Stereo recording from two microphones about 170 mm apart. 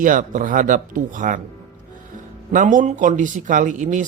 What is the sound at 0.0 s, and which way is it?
Speech, 50° right (ahead or behind).